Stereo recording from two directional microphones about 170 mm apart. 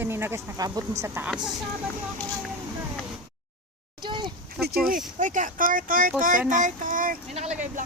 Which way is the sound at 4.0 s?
25° right (ahead or behind).